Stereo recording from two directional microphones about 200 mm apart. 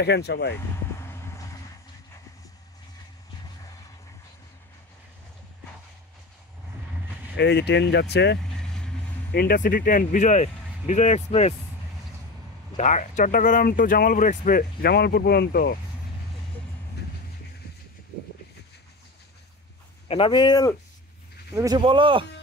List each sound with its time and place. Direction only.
0.0 s speech: 55° left (ahead or behind)
1.0 s vehicle: 15° left (ahead or behind)
7.3 s speech: 55° left (ahead or behind)
8.5 s vehicle: 5° left (ahead or behind)
9.3 s speech: 50° left (ahead or behind); by 11.5 s 35° left (ahead or behind)
12.7 s speech: 35° left (ahead or behind)
20.1 s speech: 25° left (ahead or behind)
21.5 s speech: 20° right (ahead or behind)